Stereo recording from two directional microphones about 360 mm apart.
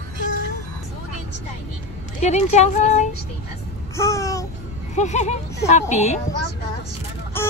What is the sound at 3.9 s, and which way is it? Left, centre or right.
Babbling, centre.